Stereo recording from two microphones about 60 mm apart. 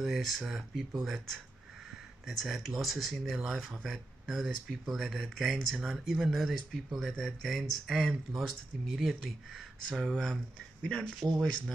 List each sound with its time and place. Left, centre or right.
0.0 s speech: centre
11.2 s speech: right